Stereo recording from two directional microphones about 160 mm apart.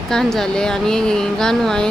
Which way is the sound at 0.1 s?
5° left (ahead or behind).